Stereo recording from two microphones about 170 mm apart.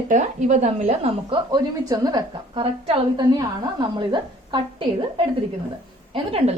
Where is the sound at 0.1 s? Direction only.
45° right (ahead or behind).